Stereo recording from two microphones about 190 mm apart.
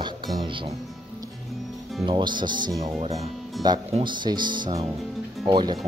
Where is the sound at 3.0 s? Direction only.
35° right (ahead or behind).